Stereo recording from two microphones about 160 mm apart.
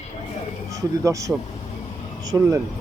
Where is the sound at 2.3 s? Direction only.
15° right (ahead or behind).